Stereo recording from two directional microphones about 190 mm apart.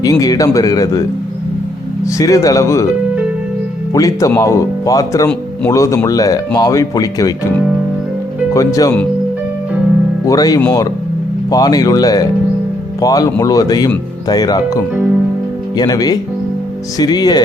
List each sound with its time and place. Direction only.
0.0 s speech: 20° left (ahead or behind)
2.0 s speech: 15° left (ahead or behind)
3.9 s speech: 20° left (ahead or behind)
8.5 s speech: 20° left (ahead or behind)
10.2 s speech: 20° left (ahead or behind)